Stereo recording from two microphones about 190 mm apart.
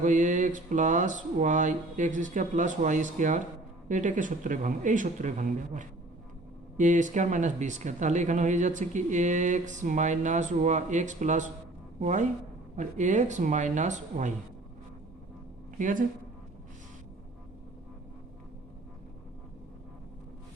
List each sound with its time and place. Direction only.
0.0 s speech: 40° right (ahead or behind)
15.8 s speech: 45° right (ahead or behind)